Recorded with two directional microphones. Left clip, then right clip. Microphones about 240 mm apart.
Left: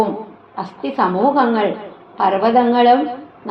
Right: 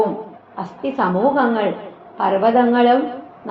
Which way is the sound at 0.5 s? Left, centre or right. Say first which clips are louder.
Left 1 dB; left.